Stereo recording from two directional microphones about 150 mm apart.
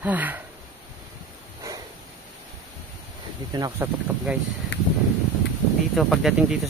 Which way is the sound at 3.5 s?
25° right (ahead or behind).